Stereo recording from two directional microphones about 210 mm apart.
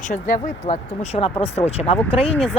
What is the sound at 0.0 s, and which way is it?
Speech, 35° left (ahead or behind).